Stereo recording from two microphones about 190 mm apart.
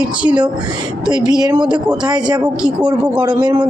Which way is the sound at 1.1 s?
20° right (ahead or behind).